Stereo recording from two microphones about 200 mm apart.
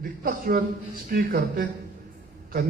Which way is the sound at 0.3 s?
45° right (ahead or behind).